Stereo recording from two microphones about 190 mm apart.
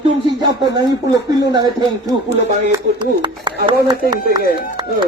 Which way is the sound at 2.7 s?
25° right (ahead or behind).